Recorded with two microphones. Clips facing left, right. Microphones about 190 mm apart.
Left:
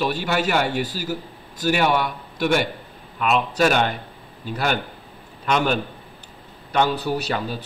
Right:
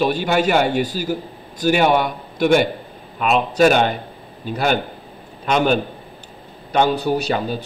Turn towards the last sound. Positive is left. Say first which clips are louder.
# right 5 dB
turn(degrees=-20)  # may be behind; listen again after turning